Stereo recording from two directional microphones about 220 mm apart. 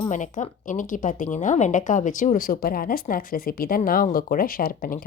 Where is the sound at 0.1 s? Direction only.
35° left (ahead or behind).